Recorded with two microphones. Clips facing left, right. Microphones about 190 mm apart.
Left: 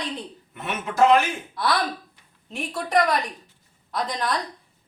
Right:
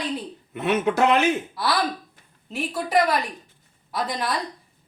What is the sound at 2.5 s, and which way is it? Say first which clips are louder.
A woman's voice: right 1 dB; 5° right (ahead or behind).